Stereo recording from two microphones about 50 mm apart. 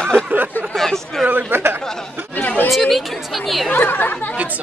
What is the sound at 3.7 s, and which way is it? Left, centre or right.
Speech, left.